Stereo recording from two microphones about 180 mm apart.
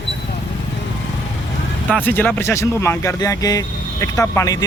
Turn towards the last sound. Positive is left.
turn(degrees=15)  # may be behind; listen again after turning